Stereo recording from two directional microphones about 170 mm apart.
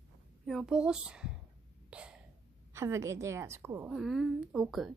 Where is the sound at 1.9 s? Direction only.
5° right (ahead or behind).